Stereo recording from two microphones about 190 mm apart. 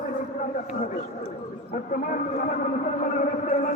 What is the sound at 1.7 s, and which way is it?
Speech, 45° left (ahead or behind).